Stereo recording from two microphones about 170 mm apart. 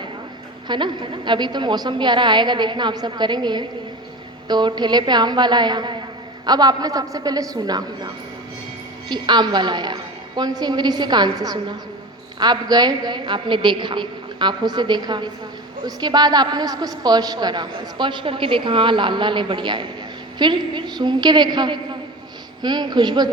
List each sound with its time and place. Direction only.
0.7 s a woman's voice: 25° right (ahead or behind)